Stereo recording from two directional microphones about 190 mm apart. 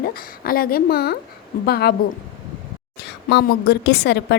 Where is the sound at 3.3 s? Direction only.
55° left (ahead or behind).